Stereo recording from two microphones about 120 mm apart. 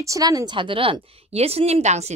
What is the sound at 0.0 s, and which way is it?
Speech, 30° right (ahead or behind).